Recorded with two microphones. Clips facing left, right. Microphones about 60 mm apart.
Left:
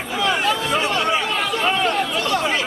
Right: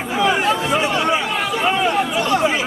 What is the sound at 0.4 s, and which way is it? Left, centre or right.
Chatter, right.